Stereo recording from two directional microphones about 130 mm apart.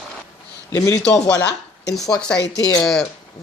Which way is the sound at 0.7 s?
25° left (ahead or behind).